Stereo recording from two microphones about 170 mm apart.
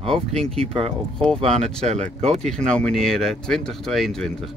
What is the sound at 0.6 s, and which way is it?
Speech, 35° right (ahead or behind).